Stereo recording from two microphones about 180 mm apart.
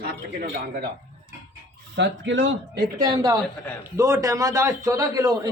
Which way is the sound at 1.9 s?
80° right.